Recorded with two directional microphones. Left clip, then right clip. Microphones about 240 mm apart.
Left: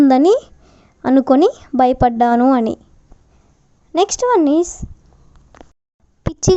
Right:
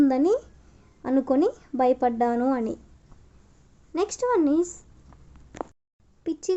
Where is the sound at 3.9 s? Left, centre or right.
Left.